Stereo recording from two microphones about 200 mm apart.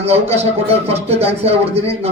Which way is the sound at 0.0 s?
30° right (ahead or behind).